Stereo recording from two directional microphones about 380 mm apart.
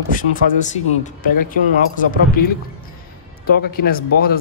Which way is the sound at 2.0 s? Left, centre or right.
Left.